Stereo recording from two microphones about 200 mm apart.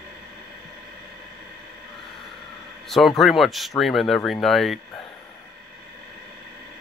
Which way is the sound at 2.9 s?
Centre (ahead or behind).